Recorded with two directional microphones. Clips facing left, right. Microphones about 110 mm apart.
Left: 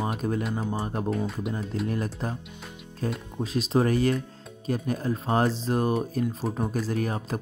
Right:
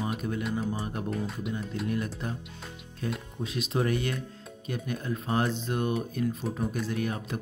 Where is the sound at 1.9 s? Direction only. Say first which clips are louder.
Left 2 dB; 35° left (ahead or behind).